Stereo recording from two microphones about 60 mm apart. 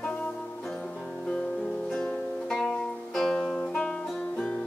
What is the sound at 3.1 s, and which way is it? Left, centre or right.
Music, centre.